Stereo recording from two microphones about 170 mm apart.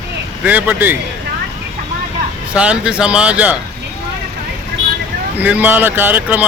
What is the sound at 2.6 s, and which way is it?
Speech, 5° right (ahead or behind).